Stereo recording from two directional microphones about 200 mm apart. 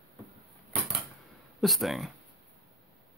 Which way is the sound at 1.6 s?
Centre (ahead or behind).